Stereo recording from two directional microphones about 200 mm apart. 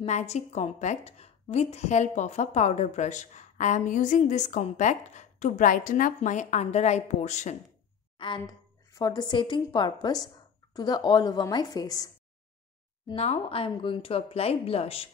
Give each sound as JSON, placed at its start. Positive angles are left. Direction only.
{"t": 0.0, "sound": "a woman's voice", "side_deg": 35}
{"t": 8.2, "sound": "a woman's voice", "side_deg": 20}
{"t": 13.1, "sound": "speech", "side_deg": 30}